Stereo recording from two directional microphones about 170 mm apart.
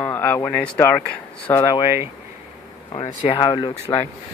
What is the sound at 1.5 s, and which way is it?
Speech, 25° left (ahead or behind).